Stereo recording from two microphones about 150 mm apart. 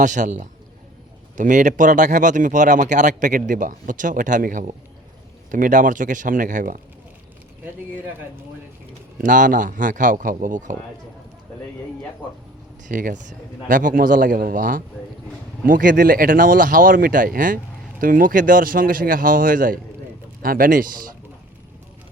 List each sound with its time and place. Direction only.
0.0 s speech: 55° right (ahead or behind)
9.1 s speech: 60° right (ahead or behind)
12.9 s speech: 65° right (ahead or behind)